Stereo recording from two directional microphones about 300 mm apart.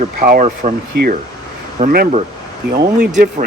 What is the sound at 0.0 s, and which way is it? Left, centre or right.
Speech, right.